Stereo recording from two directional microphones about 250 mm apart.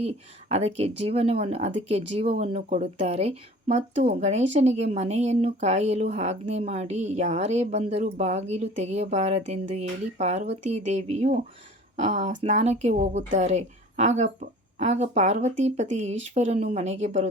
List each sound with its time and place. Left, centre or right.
0.0 s speech: right